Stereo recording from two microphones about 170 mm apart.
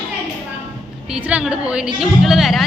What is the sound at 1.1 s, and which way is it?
A woman's voice, 5° right (ahead or behind).